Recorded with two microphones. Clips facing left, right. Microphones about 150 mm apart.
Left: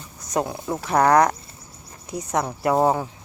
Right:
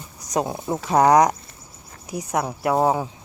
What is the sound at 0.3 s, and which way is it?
Speech, 20° right (ahead or behind).